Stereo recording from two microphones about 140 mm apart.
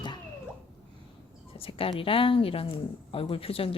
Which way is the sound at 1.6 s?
40° left (ahead or behind).